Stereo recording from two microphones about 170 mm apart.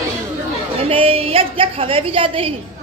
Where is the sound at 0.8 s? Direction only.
35° right (ahead or behind).